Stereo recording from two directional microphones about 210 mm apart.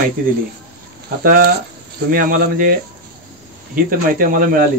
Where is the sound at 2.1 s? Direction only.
40° right (ahead or behind).